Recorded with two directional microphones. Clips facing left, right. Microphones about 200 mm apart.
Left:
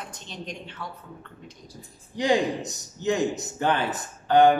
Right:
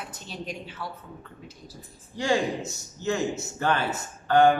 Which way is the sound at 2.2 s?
15° left (ahead or behind).